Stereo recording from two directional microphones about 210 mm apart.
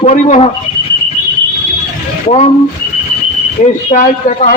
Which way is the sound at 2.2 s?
30° left (ahead or behind).